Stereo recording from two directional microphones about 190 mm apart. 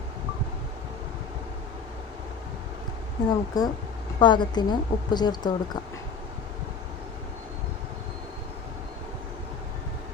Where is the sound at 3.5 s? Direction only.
20° left (ahead or behind).